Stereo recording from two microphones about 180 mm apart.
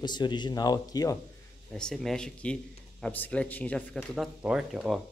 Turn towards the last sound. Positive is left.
turn(degrees=0)  # may be behind; listen again after turning